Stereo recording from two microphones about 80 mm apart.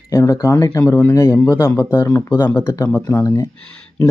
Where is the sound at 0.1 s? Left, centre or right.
Left.